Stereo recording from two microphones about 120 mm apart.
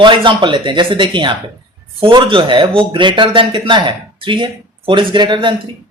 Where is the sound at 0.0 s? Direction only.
40° right (ahead or behind).